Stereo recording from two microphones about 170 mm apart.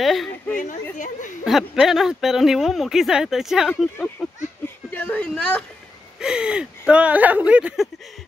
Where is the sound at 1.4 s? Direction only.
Centre (ahead or behind).